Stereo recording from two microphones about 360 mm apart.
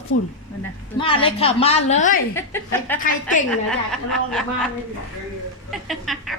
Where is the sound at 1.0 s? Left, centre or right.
Centre.